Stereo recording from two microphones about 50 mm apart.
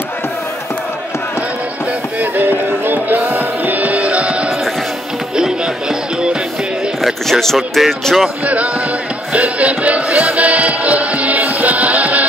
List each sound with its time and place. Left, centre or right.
2.1 s music: right; by 6.3 s centre
7.0 s speech: centre
9.3 s music: right